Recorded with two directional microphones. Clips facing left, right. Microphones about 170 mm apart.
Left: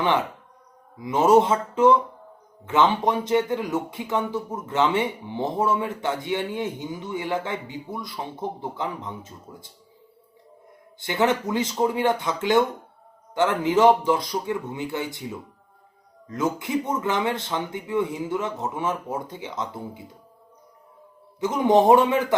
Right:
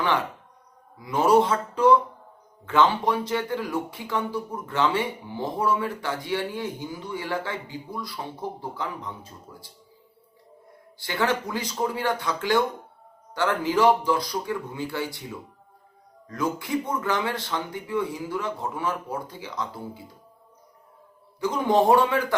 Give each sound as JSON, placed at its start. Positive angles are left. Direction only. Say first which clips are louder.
{"t": 0.9, "sound": "speech", "louder": "left 2 dB", "side_deg": 20}
{"t": 11.0, "sound": "speech", "louder": "left 3 dB", "side_deg": 20}
{"t": 21.4, "sound": "speech", "louder": "left 3 dB", "side_deg": 20}